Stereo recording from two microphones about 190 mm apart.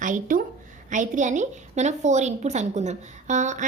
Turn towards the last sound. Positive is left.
turn(degrees=-40)  # may be behind; listen again after turning